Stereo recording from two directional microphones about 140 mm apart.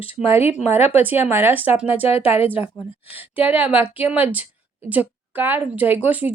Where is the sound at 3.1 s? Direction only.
10° right (ahead or behind).